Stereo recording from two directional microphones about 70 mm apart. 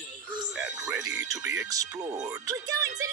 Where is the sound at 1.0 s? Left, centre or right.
Right.